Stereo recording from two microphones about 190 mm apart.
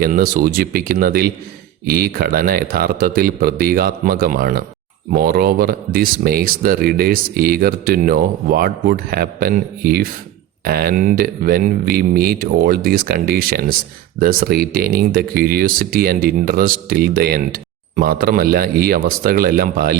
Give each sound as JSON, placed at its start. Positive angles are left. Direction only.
{"t": 0.0, "sound": "speech", "side_deg": -50}